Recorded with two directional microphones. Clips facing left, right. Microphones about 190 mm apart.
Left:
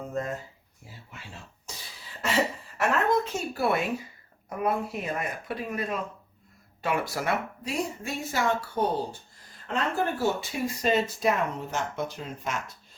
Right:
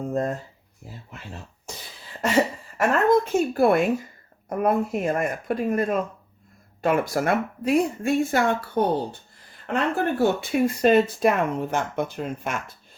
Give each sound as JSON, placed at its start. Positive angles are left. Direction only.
{"t": 0.1, "sound": "speech", "side_deg": -40}
{"t": 2.7, "sound": "a woman's voice", "side_deg": -50}